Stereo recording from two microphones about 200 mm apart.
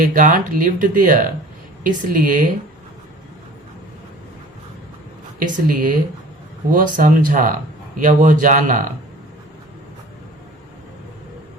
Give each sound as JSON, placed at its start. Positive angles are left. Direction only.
{"t": 0.0, "sound": "speech", "side_deg": -40}
{"t": 5.4, "sound": "speech", "side_deg": -45}